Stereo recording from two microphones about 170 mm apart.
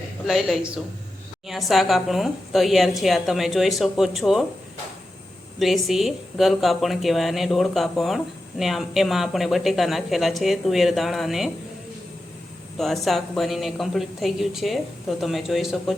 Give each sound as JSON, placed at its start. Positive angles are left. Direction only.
{"t": 0.3, "sound": "speech", "side_deg": 0}
{"t": 5.5, "sound": "speech", "side_deg": 0}
{"t": 12.8, "sound": "speech", "side_deg": 0}